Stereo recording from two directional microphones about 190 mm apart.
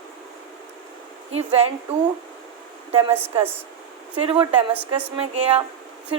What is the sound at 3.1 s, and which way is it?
Speech, 10° right (ahead or behind).